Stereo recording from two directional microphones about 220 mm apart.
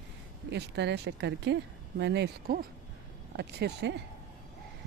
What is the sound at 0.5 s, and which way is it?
Speech, 50° right (ahead or behind).